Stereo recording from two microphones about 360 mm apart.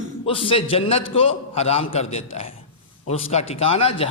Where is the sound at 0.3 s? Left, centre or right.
Centre.